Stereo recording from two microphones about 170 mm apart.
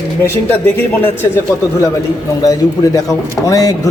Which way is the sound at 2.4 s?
20° left (ahead or behind).